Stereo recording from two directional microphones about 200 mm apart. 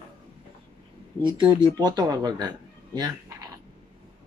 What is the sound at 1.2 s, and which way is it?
Speech, 25° right (ahead or behind).